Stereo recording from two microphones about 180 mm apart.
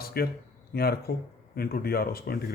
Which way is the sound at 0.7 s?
60° left (ahead or behind).